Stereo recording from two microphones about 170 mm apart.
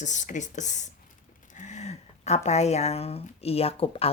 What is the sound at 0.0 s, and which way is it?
Speech, 45° left (ahead or behind).